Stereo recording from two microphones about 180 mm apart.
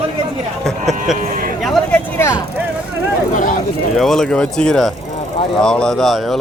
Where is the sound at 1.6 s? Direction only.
Centre (ahead or behind).